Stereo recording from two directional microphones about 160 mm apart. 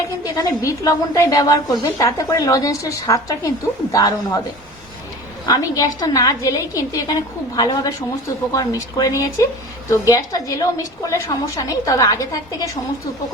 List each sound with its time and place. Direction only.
0.3 s a woman's voice: 20° left (ahead or behind)
5.5 s a woman's voice: 20° left (ahead or behind)